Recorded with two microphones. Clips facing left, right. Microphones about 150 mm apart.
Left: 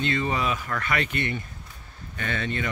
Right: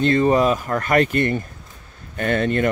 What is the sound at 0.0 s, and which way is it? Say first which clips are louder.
Speech: right 10 dB; 40° right (ahead or behind).